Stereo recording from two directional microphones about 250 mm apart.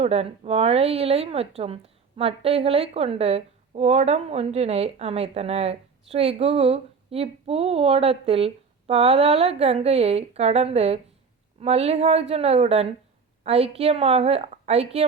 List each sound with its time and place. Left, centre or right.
0.0 s speech: right